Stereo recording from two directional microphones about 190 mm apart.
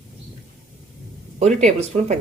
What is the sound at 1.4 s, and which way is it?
Speech, 35° right (ahead or behind).